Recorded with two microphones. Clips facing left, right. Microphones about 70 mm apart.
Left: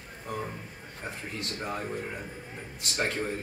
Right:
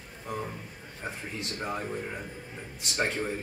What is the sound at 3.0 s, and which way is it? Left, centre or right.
Speech, centre.